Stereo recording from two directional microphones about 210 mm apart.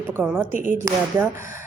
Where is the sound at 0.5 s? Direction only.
40° right (ahead or behind).